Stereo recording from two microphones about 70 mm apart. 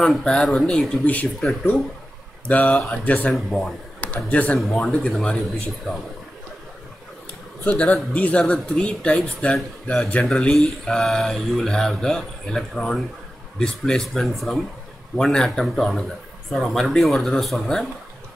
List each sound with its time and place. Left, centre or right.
0.0 s speech: centre
1.0 s speech: left
2.4 s speech: centre
3.3 s speech: centre
4.0 s a man's voice: left
4.6 s speech: centre
7.6 s speech: left; by 17.8 s centre